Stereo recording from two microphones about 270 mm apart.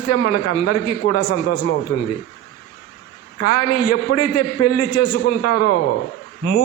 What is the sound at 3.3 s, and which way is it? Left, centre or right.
A man's voice, left.